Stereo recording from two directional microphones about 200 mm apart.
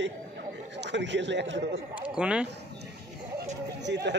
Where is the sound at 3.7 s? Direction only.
60° right (ahead or behind).